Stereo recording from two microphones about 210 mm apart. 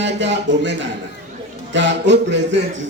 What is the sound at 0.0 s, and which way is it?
A man's voice, 60° right (ahead or behind).